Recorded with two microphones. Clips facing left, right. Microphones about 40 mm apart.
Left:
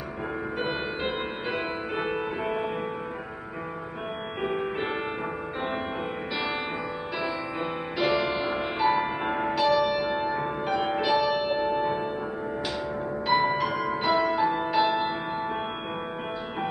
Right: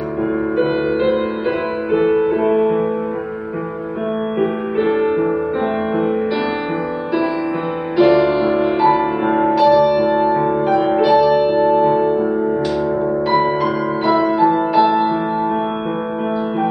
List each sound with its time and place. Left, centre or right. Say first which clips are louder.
0.6 s music: right 13 dB; centre
4.4 s music: right 9 dB; centre
8.0 s music: right 13 dB; centre
9.6 s music: right 10 dB; centre
10.1 s music: right 13 dB; centre
11.6 s music: right 13 dB; centre
13.3 s music: right 5 dB; centre